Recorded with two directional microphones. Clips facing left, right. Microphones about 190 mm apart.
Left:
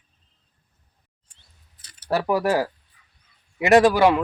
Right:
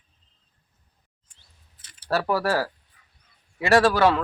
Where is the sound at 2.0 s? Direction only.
15° left (ahead or behind).